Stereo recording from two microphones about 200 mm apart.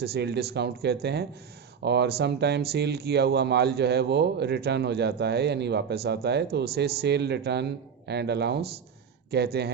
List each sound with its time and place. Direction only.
0.0 s speech: 55° right (ahead or behind)